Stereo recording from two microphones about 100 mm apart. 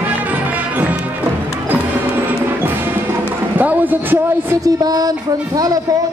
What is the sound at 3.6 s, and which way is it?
Speech, 15° right (ahead or behind).